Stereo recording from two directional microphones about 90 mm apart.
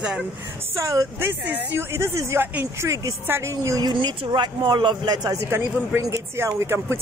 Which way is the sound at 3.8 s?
60° right (ahead or behind).